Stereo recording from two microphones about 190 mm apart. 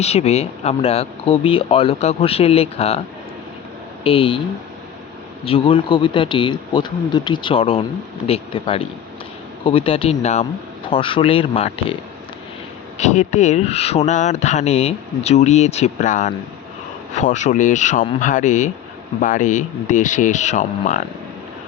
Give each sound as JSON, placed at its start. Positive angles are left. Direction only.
{"t": 0.0, "sound": "speech", "side_deg": 35}
{"t": 4.0, "sound": "speech", "side_deg": 30}
{"t": 5.5, "sound": "speech", "side_deg": 30}
{"t": 13.0, "sound": "speech", "side_deg": 35}